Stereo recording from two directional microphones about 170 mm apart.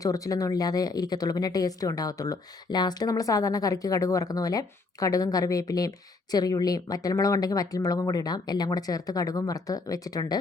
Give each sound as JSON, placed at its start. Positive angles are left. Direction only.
{"t": 0.0, "sound": "speech", "side_deg": 20}